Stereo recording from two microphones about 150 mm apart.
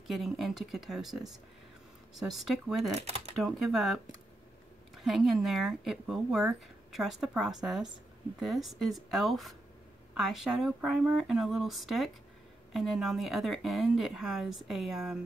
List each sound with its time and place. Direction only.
0.0 s speech: centre (ahead or behind)
3.0 s speech: 40° right (ahead or behind)
3.3 s speech: centre (ahead or behind)